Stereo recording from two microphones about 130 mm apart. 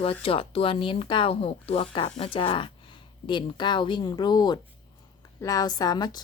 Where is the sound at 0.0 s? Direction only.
45° left (ahead or behind).